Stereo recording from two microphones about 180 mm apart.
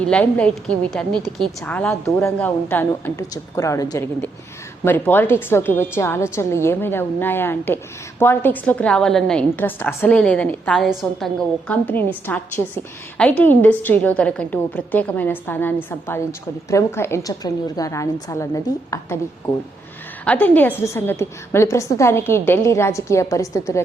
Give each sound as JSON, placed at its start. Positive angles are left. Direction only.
{"t": 0.1, "sound": "a woman's voice", "side_deg": 5}
{"t": 20.2, "sound": "a woman's voice", "side_deg": 10}